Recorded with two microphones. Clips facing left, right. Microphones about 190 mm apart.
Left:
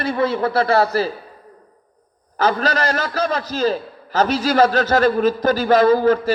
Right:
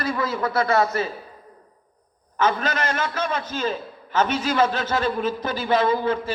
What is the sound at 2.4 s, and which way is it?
A man's voice, 35° left (ahead or behind).